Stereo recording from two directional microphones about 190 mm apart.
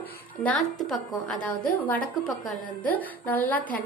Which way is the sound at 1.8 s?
5° left (ahead or behind).